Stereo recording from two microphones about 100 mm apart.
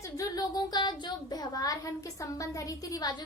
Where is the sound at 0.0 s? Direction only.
35° left (ahead or behind).